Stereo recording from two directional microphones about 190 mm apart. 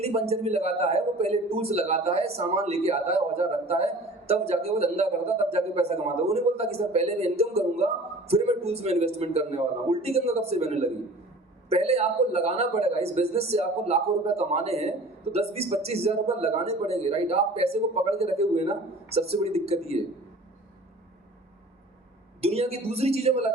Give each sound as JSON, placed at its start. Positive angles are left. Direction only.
{"t": 0.0, "sound": "a man's voice", "side_deg": -35}
{"t": 22.4, "sound": "a man's voice", "side_deg": -30}